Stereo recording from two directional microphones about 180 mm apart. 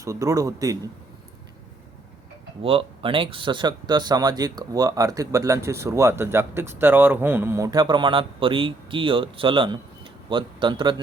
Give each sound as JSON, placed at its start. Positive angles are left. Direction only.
{"t": 0.0, "sound": "a man's voice", "side_deg": -20}
{"t": 2.6, "sound": "speech", "side_deg": -30}